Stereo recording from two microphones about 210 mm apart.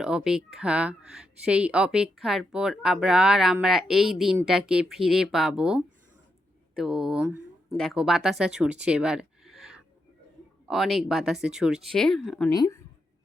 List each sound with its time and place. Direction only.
0.0 s speech: centre (ahead or behind)
12.5 s speech: 15° left (ahead or behind)